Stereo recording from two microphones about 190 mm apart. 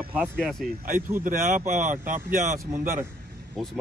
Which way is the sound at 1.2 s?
45° right (ahead or behind).